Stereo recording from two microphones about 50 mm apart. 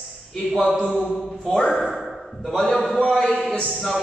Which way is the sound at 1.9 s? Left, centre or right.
Centre.